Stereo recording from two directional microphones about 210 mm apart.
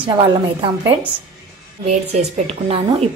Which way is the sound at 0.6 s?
25° right (ahead or behind).